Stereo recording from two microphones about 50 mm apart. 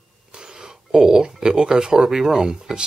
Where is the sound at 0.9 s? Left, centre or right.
Centre.